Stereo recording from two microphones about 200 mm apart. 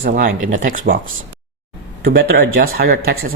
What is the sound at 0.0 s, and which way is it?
Speech, 45° right (ahead or behind).